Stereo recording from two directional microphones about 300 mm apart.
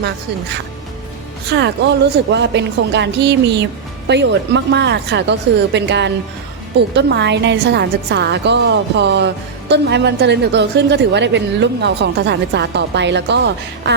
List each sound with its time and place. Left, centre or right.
1.5 s a woman's voice: right